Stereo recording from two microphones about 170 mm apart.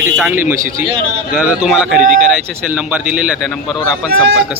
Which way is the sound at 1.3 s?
Centre (ahead or behind).